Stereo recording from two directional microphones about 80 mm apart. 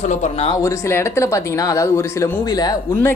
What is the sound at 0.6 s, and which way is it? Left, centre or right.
Speech, left.